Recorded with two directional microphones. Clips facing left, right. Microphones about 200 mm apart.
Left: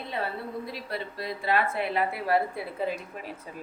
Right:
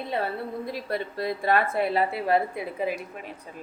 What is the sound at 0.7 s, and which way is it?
A woman's voice, 50° right (ahead or behind).